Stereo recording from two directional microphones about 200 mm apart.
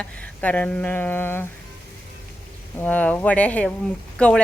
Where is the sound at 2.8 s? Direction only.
10° left (ahead or behind).